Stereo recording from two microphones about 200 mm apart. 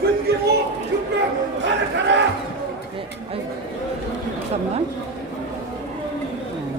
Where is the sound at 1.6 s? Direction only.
60° right (ahead or behind).